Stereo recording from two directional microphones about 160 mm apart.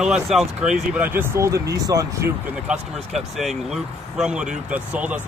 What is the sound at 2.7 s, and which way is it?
Speech, centre (ahead or behind).